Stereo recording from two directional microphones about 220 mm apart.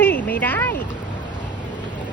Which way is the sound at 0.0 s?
10° left (ahead or behind).